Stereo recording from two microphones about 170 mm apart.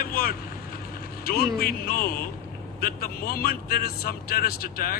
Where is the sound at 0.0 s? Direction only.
60° left (ahead or behind).